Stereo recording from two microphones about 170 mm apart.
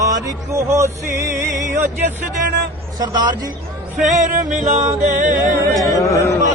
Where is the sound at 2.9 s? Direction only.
25° right (ahead or behind).